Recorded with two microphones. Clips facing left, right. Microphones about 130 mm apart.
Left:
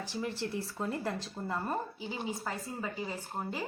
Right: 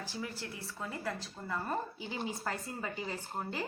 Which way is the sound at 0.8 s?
40° left (ahead or behind).